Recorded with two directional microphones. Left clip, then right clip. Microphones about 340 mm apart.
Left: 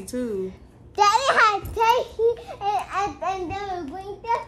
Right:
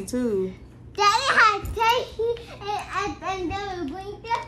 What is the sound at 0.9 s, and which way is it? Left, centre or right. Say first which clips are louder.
Child singing: left 1 dB; left.